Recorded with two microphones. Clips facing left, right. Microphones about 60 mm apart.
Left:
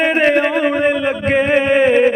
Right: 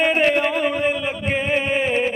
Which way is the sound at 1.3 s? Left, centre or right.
Left.